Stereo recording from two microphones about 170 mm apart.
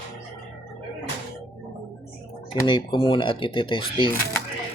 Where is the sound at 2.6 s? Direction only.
25° left (ahead or behind).